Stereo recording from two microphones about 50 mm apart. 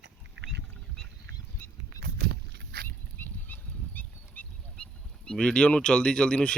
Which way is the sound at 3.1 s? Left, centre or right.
Left.